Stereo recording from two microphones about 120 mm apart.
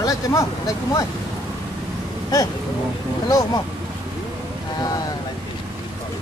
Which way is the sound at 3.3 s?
30° left (ahead or behind).